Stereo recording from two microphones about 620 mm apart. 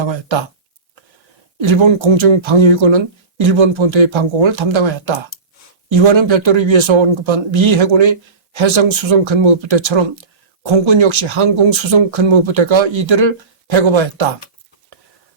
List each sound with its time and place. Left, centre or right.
1.6 s speech: right